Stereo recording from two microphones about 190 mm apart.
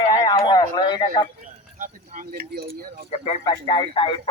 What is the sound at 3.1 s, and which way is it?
Speech, 35° left (ahead or behind).